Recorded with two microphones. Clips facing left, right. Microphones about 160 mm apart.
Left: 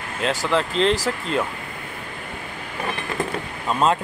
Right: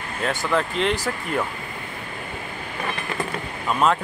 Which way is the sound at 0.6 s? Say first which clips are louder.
Left 3 dB; 30° left (ahead or behind).